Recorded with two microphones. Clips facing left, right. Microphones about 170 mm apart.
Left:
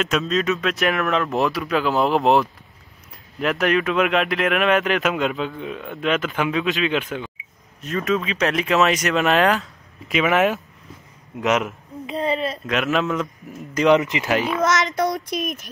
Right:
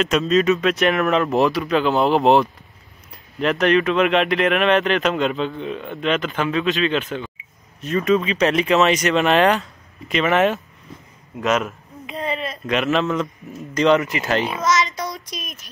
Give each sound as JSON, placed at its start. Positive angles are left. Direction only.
{"t": 0.0, "sound": "speech", "side_deg": 0}
{"t": 7.8, "sound": "speech", "side_deg": 0}
{"t": 11.4, "sound": "speech", "side_deg": 15}
{"t": 12.1, "sound": "a sound", "side_deg": 30}
{"t": 12.6, "sound": "speech", "side_deg": 0}
{"t": 15.0, "sound": "a sound", "side_deg": 55}